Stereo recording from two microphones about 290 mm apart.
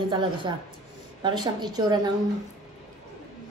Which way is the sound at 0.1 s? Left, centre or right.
Centre.